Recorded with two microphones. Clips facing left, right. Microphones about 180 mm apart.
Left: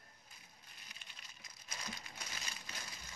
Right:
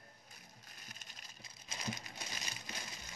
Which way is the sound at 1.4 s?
25° right (ahead or behind).